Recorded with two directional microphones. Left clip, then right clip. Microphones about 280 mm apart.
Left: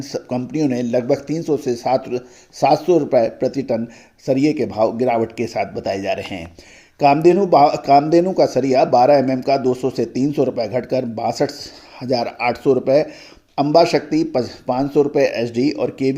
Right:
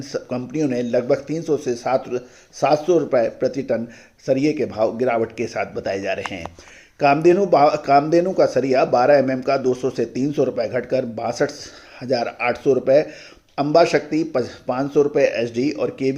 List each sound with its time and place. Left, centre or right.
0.0 s speech: left